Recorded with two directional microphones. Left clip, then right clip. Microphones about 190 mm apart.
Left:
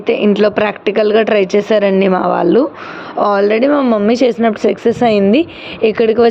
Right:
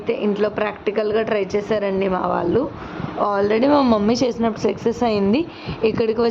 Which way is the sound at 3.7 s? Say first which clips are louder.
Left 4 dB; 5° right (ahead or behind).